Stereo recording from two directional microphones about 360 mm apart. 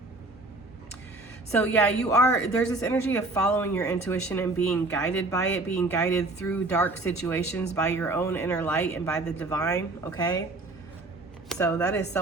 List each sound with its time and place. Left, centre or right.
1.5 s speech: centre
11.4 s a woman's voice: centre